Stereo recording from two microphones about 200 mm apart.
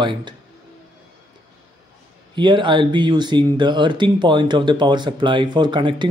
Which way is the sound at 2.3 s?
25° right (ahead or behind).